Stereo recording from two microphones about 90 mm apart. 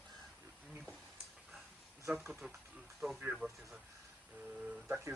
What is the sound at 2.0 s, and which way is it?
Speech, 5° right (ahead or behind).